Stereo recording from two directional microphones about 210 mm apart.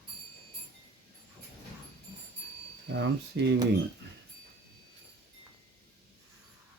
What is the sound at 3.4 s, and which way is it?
Speech, 60° right (ahead or behind).